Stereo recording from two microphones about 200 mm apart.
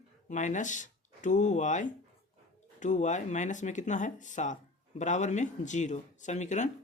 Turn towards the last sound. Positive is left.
turn(degrees=35)  # may be behind; listen again after turning